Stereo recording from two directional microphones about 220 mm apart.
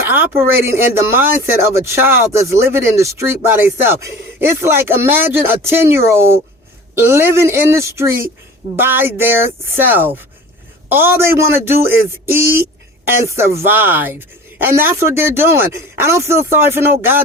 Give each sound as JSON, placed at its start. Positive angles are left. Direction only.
{"t": 0.1, "sound": "speech", "side_deg": -10}